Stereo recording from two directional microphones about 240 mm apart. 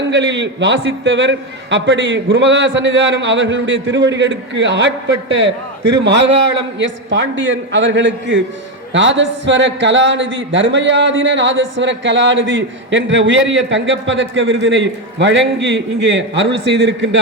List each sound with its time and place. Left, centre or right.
0.1 s a man's voice: right